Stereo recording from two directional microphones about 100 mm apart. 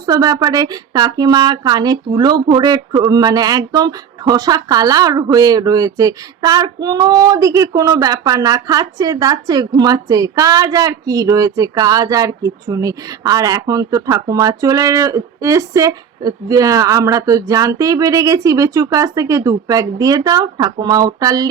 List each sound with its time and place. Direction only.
0.0 s a woman's voice: 40° right (ahead or behind)